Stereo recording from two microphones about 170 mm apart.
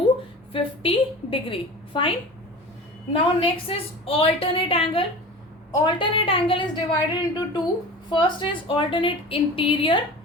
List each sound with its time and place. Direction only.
0.5 s a woman's voice: 30° left (ahead or behind)